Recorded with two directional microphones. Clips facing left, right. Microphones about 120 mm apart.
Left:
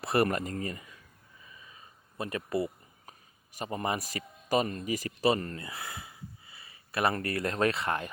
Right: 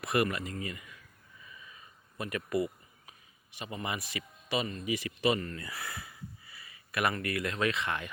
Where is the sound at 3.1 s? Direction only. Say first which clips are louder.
Left 7 dB; 40° left (ahead or behind).